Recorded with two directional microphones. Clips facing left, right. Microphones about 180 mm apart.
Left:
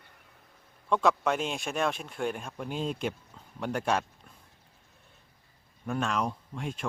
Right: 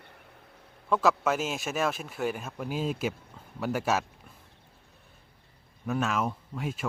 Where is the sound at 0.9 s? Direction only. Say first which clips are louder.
Right 1 dB; centre (ahead or behind).